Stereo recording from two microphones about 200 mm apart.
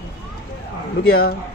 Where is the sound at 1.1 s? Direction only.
50° left (ahead or behind).